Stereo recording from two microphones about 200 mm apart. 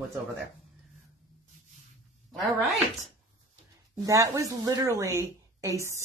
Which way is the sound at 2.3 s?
Centre (ahead or behind).